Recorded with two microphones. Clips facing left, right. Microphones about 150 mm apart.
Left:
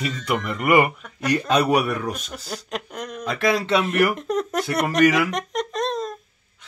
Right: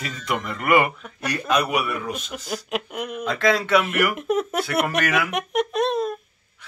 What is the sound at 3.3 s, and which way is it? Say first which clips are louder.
Speech: right 1 dB; 15° left (ahead or behind).